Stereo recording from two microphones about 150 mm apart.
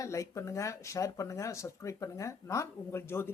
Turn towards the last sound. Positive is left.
turn(degrees=15)  # may be behind; listen again after turning